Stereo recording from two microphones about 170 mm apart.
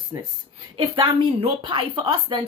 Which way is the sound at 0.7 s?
30° right (ahead or behind).